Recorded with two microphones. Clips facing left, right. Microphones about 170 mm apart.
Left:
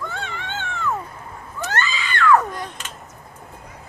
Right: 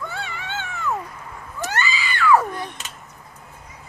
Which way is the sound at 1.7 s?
10° right (ahead or behind).